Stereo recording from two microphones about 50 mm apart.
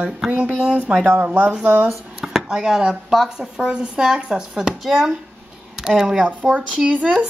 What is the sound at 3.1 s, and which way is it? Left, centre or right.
Speech, centre.